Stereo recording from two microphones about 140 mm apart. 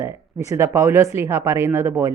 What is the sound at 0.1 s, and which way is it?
Speech, 20° right (ahead or behind).